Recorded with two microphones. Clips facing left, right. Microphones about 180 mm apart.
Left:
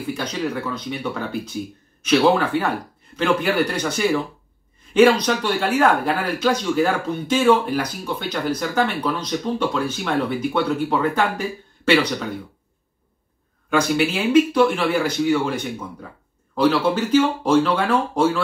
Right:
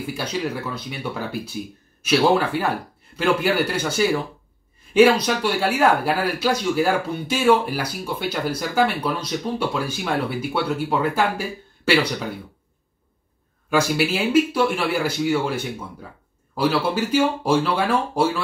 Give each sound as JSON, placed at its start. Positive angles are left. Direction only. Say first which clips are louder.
{"t": 0.0, "sound": "speech", "louder": "left 1 dB", "side_deg": -10}
{"t": 13.7, "sound": "speech", "louder": "left 1 dB", "side_deg": -5}